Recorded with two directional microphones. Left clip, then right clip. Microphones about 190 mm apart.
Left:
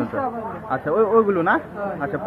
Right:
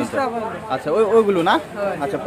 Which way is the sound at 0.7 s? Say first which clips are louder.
Right 1 dB; 10° right (ahead or behind).